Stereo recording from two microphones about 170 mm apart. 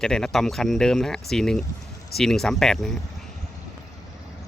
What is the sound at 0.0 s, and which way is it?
Speech, 5° left (ahead or behind).